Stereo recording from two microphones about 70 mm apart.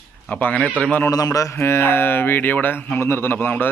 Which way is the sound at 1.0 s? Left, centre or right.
Left.